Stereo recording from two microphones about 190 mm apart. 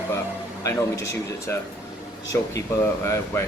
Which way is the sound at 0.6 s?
15° left (ahead or behind).